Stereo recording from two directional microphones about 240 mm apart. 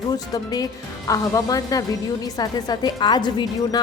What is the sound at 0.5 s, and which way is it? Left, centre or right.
A woman's voice, centre.